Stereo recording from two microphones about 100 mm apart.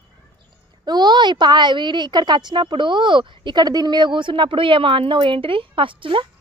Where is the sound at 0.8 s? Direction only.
45° right (ahead or behind).